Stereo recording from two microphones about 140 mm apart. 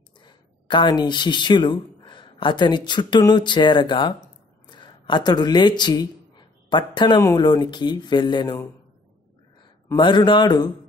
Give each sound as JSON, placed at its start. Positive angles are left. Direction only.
{"t": 0.2, "sound": "speech", "side_deg": 35}
{"t": 9.9, "sound": "speech", "side_deg": 35}